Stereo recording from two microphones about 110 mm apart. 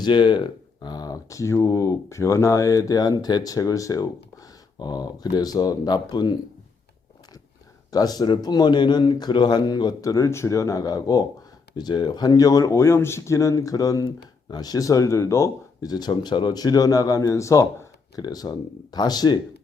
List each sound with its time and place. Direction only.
0.0 s speech: 45° left (ahead or behind)
7.9 s speech: 35° left (ahead or behind)